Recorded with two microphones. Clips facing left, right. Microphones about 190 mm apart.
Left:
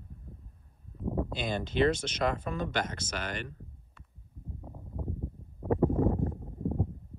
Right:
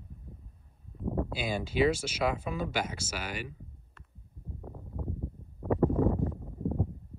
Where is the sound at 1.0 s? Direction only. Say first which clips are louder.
Even; centre (ahead or behind).